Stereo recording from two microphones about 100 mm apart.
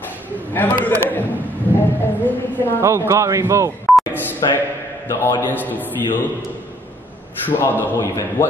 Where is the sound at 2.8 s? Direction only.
30° right (ahead or behind).